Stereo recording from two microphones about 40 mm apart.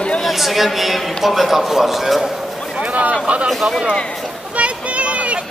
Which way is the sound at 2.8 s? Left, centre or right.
Right.